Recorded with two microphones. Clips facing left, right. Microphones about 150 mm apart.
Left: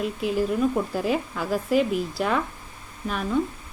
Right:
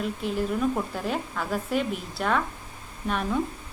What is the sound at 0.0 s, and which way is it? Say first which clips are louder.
Speech: left 3 dB; 5° left (ahead or behind).